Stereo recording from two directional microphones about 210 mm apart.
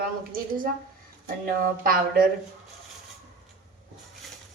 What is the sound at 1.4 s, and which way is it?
Speech, 45° right (ahead or behind).